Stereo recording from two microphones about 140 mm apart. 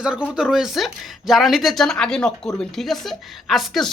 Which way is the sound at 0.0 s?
5° right (ahead or behind).